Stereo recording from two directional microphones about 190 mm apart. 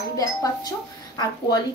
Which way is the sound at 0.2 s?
20° left (ahead or behind).